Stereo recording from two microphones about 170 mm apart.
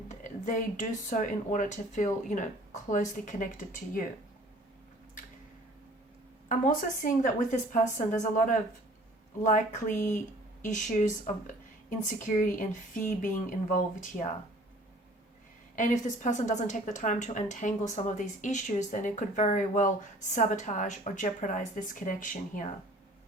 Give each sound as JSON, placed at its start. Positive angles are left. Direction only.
{"t": 0.1, "sound": "speech", "side_deg": 45}
{"t": 6.5, "sound": "speech", "side_deg": 50}
{"t": 15.7, "sound": "speech", "side_deg": 50}